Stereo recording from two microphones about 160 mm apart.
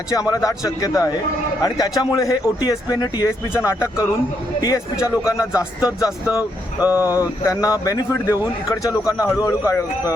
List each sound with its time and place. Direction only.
0.1 s speech: 20° left (ahead or behind)
6.7 s speech: 10° right (ahead or behind)
7.2 s speech: 20° left (ahead or behind)